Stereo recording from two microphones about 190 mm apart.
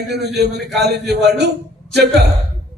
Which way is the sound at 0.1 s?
60° right (ahead or behind).